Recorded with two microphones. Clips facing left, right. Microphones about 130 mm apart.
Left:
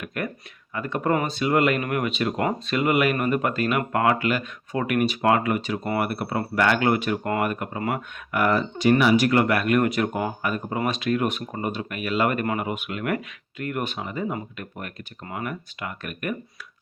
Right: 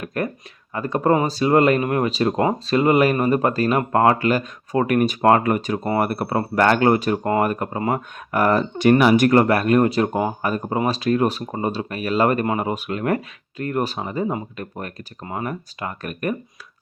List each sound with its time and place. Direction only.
0.0 s a sound: 35° right (ahead or behind)
0.7 s speech: 35° right (ahead or behind)
8.8 s speech: 50° right (ahead or behind); by 16.3 s 35° right (ahead or behind)